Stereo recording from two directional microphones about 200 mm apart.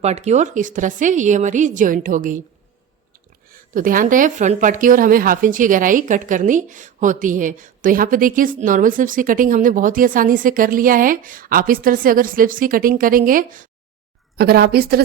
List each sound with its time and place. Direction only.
0.0 s a woman's voice: 35° right (ahead or behind)
3.5 s speech: 45° right (ahead or behind)